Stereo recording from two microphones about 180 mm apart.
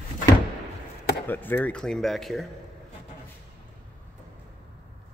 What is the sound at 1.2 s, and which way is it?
Speech, 10° left (ahead or behind).